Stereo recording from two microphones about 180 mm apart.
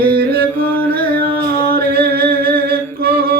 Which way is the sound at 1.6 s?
60° right (ahead or behind).